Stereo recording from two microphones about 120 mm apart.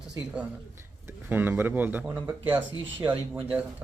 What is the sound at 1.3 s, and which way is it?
Speech, 15° right (ahead or behind).